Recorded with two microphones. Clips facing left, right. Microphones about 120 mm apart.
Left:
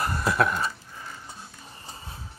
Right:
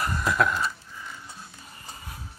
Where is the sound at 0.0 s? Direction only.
30° left (ahead or behind).